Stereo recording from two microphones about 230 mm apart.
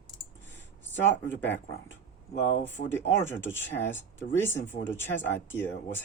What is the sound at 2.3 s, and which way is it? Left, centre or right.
Speech, left.